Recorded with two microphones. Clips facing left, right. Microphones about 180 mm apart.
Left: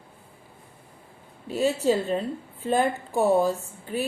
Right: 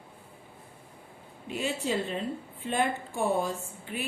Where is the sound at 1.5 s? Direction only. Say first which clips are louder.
Left 8 dB; 40° left (ahead or behind).